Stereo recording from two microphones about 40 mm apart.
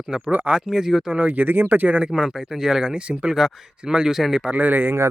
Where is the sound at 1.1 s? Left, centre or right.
Right.